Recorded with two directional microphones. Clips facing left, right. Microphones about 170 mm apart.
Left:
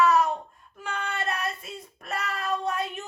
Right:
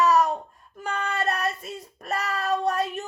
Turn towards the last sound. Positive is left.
turn(degrees=-40)  # may be behind; listen again after turning